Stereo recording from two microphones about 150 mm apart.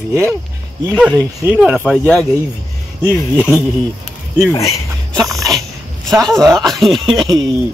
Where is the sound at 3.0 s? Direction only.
10° right (ahead or behind).